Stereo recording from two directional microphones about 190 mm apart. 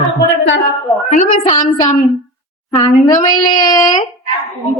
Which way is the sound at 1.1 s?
40° left (ahead or behind).